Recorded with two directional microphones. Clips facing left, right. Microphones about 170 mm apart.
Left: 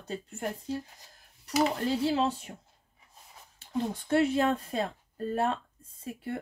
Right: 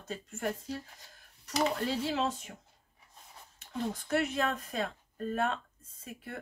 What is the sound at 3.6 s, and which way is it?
Speech, 30° left (ahead or behind).